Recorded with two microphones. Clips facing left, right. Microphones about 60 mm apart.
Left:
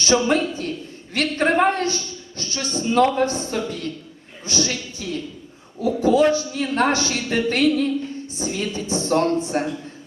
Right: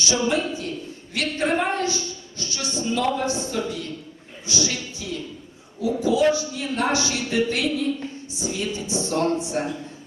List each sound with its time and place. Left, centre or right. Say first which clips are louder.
0.0 s a woman's voice: left 4 dB; left